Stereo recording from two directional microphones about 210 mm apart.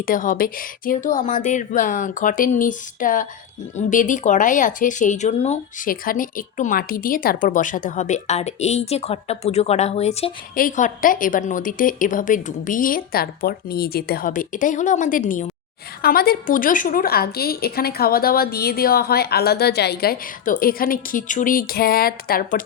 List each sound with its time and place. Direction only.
0.0 s a woman's voice: 40° left (ahead or behind)